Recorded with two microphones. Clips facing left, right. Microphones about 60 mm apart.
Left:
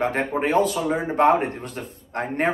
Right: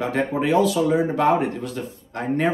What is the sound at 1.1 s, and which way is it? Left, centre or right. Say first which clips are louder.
Speech: left 1 dB; left.